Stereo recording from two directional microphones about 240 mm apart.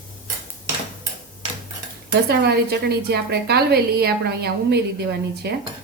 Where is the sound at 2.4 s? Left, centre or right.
Right.